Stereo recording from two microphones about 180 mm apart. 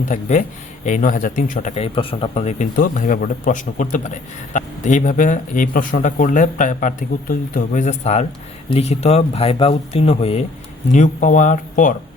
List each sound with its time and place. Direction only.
0.1 s speech: 45° left (ahead or behind)
10.9 s speech: 45° left (ahead or behind)